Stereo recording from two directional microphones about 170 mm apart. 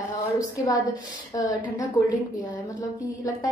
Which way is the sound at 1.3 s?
20° left (ahead or behind).